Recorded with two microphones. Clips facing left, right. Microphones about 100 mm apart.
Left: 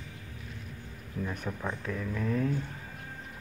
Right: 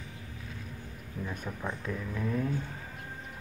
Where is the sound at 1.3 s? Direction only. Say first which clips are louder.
Left 2 dB; 15° left (ahead or behind).